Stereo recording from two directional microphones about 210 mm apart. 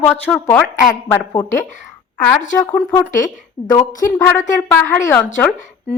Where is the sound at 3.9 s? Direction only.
40° left (ahead or behind).